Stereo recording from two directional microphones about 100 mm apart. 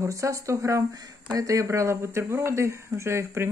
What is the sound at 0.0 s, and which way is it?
A woman's voice, 30° right (ahead or behind).